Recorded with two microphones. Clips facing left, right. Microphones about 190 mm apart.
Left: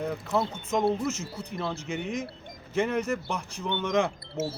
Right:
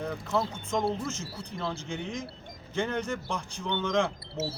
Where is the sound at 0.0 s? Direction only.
5° left (ahead or behind).